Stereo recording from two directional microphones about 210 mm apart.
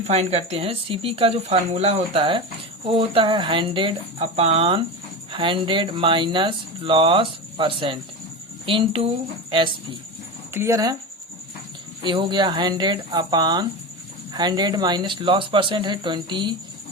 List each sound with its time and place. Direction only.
0.1 s speech: 30° right (ahead or behind)
10.5 s speech: 10° right (ahead or behind)
12.0 s speech: 20° right (ahead or behind)